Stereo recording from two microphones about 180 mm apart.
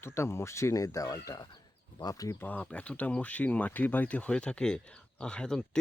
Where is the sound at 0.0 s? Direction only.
15° left (ahead or behind).